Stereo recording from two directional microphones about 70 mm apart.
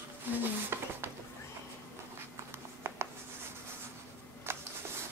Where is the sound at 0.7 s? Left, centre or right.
Right.